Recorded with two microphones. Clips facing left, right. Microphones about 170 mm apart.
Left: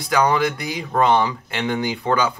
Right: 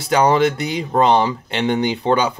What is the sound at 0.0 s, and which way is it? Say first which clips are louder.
Speech: right 4 dB; 25° right (ahead or behind).